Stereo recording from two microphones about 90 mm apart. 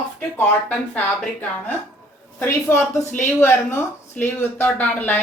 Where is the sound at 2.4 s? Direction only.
30° left (ahead or behind).